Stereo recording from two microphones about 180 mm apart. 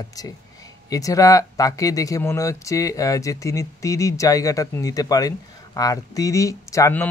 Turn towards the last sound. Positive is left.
turn(degrees=15)  # may be behind; listen again after turning